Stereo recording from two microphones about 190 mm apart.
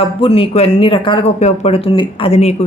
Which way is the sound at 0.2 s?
30° left (ahead or behind).